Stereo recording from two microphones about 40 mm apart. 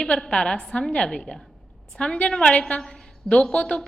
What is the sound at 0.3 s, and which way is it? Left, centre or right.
A woman's voice, left.